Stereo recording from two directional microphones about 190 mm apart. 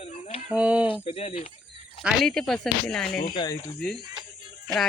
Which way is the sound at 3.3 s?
20° left (ahead or behind).